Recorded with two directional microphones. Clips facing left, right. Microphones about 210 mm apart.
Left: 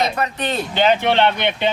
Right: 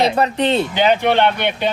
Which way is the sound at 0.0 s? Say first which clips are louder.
Right 5 dB; 30° right (ahead or behind).